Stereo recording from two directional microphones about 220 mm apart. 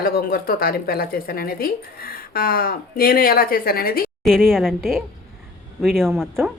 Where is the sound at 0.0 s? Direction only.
45° left (ahead or behind).